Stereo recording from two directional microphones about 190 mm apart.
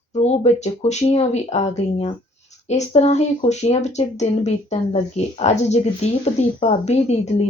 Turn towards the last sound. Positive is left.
turn(degrees=35)  # may be behind; listen again after turning